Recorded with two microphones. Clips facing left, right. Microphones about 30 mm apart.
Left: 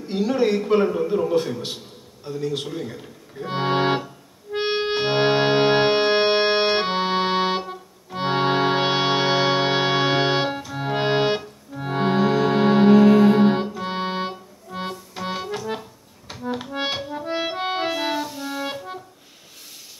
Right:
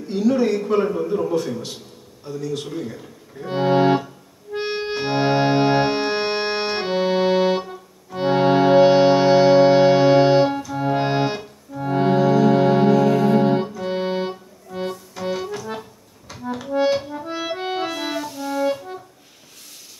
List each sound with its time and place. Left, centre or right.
0.3 s a man's voice: left
1.3 s a man's voice: left; by 3.4 s centre
3.4 s accordion: left
8.1 s organ: left
11.8 s music: left
16.3 s accordion: left
17.3 s music: left